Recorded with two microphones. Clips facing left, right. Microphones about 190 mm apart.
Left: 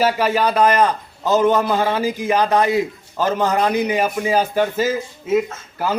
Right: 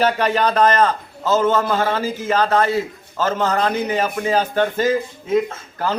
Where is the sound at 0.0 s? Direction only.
5° left (ahead or behind).